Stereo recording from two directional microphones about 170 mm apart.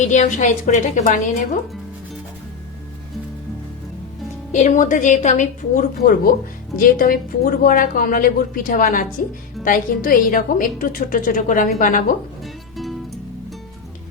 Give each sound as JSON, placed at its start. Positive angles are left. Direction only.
{"t": 0.0, "sound": "a woman's voice", "side_deg": 45}
{"t": 4.5, "sound": "a woman's voice", "side_deg": 45}
{"t": 6.0, "sound": "a woman's voice", "side_deg": 55}
{"t": 12.7, "sound": "music", "side_deg": 0}